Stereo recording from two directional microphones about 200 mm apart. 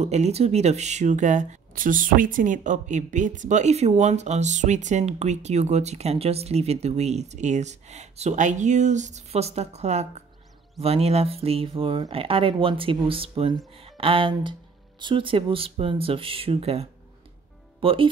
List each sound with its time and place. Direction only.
0.0 s speech: 35° right (ahead or behind)